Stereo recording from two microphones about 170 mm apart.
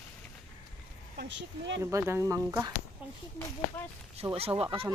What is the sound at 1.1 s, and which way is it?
Speech, 80° right.